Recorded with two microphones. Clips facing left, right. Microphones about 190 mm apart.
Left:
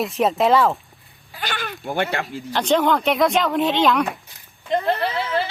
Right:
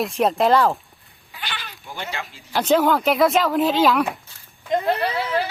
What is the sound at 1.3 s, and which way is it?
Speech, 45° left (ahead or behind).